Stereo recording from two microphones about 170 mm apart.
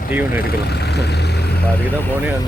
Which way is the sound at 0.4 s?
70° left (ahead or behind).